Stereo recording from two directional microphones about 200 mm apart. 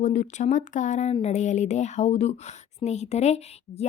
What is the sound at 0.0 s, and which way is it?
Speech, 35° left (ahead or behind).